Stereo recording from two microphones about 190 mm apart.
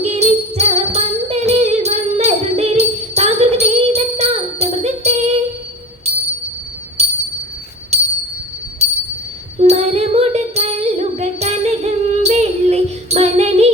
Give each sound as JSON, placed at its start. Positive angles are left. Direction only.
{"t": 0.0, "sound": "music", "side_deg": -35}
{"t": 8.8, "sound": "a sound", "side_deg": -35}
{"t": 9.6, "sound": "music", "side_deg": -35}